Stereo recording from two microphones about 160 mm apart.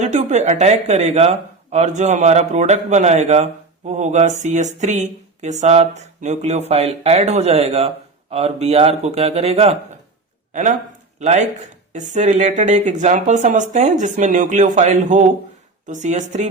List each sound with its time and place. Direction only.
0.0 s a man's voice: 45° right (ahead or behind)
10.5 s speech: 50° right (ahead or behind)